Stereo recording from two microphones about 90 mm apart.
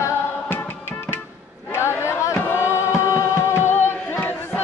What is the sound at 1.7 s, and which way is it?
Music, 30° left (ahead or behind).